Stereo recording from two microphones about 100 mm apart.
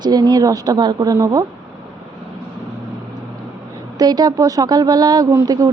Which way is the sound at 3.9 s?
45° right (ahead or behind).